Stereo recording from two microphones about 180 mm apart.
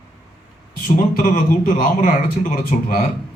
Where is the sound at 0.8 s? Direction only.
45° left (ahead or behind).